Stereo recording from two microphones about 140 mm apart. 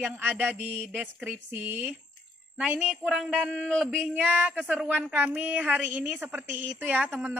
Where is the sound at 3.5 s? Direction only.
Centre (ahead or behind).